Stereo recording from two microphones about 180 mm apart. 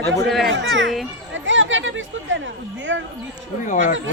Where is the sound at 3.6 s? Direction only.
45° left (ahead or behind).